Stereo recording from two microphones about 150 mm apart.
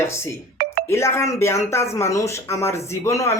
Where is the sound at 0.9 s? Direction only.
20° left (ahead or behind).